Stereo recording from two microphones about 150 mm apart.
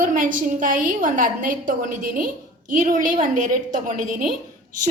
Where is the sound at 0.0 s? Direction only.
65° right (ahead or behind).